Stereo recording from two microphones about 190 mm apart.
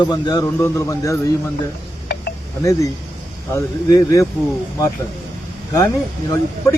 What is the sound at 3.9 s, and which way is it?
Speech, 15° left (ahead or behind).